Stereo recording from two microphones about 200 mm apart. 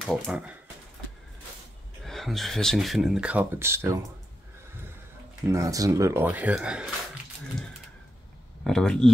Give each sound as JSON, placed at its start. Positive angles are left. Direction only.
{"t": 0.0, "sound": "speech", "side_deg": -5}
{"t": 2.0, "sound": "speech", "side_deg": 0}
{"t": 5.5, "sound": "speech", "side_deg": -15}
{"t": 8.6, "sound": "speech", "side_deg": 0}